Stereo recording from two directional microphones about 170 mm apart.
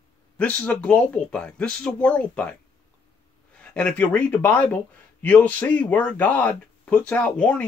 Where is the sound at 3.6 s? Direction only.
5° left (ahead or behind).